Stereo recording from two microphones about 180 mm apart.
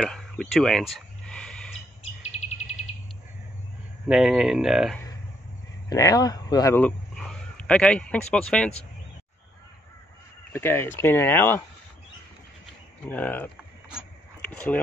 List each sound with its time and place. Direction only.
0.0 s a sound: centre (ahead or behind)
4.1 s speech: 5° right (ahead or behind)
5.9 s speech: 20° left (ahead or behind)
6.8 s speech: 5° left (ahead or behind)
10.5 s speech: 10° left (ahead or behind)
13.1 s speech: 10° left (ahead or behind)